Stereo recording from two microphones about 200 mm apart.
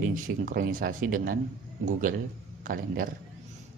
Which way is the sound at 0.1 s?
45° right (ahead or behind).